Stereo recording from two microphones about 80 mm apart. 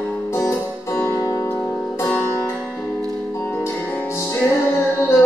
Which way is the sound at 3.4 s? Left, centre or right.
Left.